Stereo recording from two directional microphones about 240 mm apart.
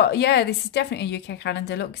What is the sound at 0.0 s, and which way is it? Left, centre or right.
A woman's voice, left.